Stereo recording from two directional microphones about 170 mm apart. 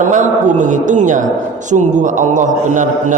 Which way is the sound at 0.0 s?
45° right (ahead or behind).